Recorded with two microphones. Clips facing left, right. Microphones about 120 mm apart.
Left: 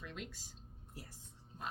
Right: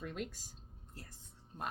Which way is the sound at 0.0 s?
45° right (ahead or behind).